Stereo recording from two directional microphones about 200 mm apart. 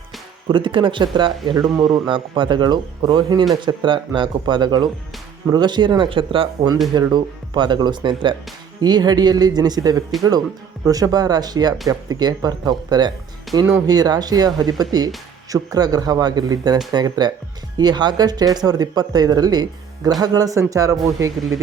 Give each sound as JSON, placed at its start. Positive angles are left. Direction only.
{"t": 0.4, "sound": "speech", "side_deg": -25}